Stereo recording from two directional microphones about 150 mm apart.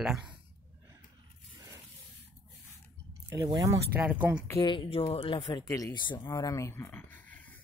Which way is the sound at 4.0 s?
10° right (ahead or behind).